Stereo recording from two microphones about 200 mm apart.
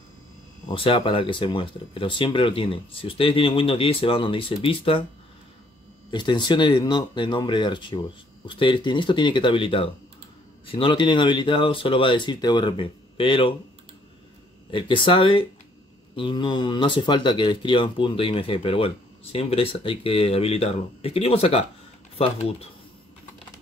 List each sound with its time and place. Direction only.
0.7 s speech: 25° left (ahead or behind)
6.0 s speech: 25° left (ahead or behind)
14.7 s speech: 25° left (ahead or behind)